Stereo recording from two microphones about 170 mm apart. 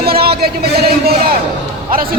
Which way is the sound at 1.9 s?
60° right (ahead or behind).